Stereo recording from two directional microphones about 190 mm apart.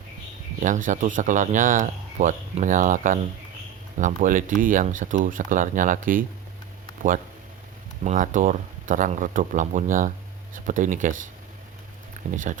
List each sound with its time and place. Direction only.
0.6 s speech: 45° right (ahead or behind)
8.0 s speech: 45° right (ahead or behind)
12.2 s speech: 40° right (ahead or behind)